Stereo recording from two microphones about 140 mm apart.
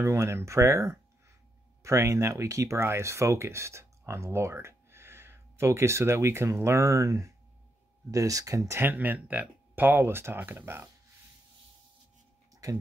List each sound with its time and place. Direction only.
0.0 s speech: 20° right (ahead or behind)
12.6 s speech: 25° right (ahead or behind)